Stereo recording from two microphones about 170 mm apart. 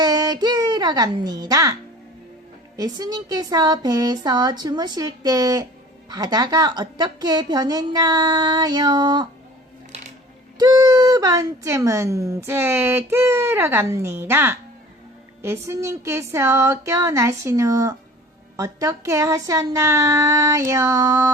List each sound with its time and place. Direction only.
0.0 s a sound: 25° right (ahead or behind)
2.7 s a woman's voice: 20° right (ahead or behind)
10.6 s a woman's voice: 20° right (ahead or behind)